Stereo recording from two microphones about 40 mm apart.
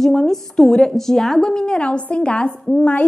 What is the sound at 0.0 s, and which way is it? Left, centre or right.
A woman's voice, centre.